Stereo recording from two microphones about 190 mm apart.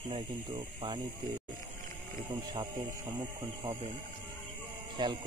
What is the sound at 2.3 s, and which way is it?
Speech, 25° right (ahead or behind).